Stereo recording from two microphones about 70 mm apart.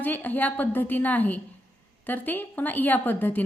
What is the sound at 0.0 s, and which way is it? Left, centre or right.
A woman's voice, left.